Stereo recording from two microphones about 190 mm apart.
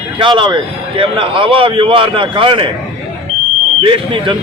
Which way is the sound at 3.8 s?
25° right (ahead or behind).